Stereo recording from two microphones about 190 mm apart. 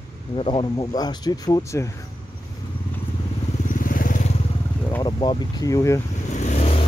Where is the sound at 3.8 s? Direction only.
45° left (ahead or behind).